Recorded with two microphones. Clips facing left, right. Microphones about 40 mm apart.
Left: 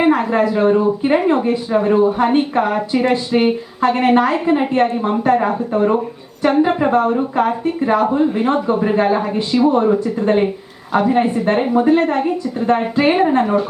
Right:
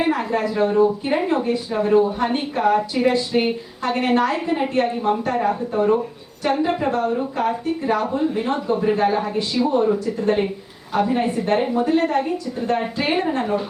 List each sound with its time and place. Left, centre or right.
0.0 s a woman's voice: left
9.7 s speech: left